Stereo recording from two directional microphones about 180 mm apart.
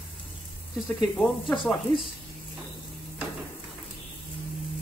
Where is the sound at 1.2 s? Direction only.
Centre (ahead or behind).